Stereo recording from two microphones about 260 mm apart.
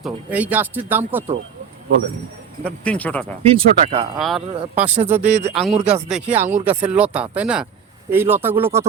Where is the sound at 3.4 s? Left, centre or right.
Right.